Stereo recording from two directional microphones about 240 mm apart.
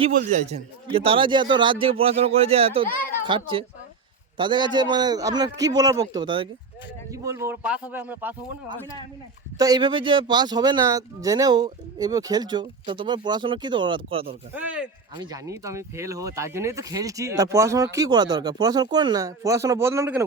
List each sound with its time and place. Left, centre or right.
0.3 s a man's voice: right; by 8.4 s centre
9.6 s speech: centre
14.5 s speech: centre